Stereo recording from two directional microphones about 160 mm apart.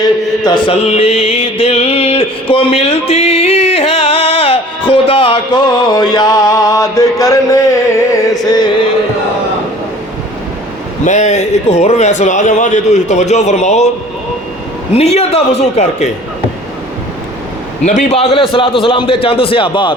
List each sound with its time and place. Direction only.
0.4 s music: 30° left (ahead or behind)
11.0 s a man's voice: 50° left (ahead or behind)
14.9 s a man's voice: 40° left (ahead or behind)
17.8 s a man's voice: 45° left (ahead or behind); by 20.0 s 30° left (ahead or behind)